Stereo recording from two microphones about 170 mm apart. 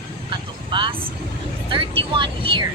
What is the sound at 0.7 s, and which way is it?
Speech, 30° right (ahead or behind).